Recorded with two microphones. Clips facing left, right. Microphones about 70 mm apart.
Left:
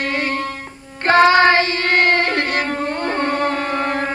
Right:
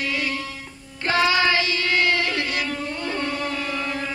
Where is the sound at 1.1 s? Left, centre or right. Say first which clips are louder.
Left 8 dB; left.